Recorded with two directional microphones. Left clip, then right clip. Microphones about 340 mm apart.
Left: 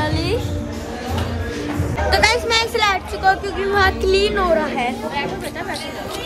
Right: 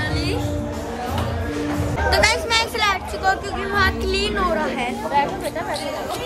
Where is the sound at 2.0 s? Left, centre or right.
Centre.